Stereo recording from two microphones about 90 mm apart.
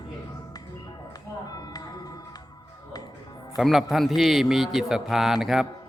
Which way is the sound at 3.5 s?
Centre (ahead or behind).